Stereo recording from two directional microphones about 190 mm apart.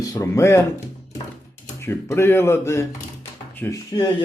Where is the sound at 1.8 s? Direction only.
15° left (ahead or behind).